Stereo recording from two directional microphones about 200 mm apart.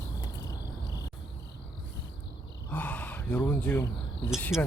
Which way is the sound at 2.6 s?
10° left (ahead or behind).